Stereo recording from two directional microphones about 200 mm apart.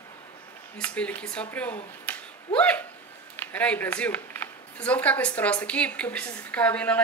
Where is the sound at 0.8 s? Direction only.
5° left (ahead or behind).